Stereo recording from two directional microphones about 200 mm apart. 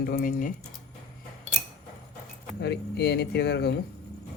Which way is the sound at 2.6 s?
55° left (ahead or behind).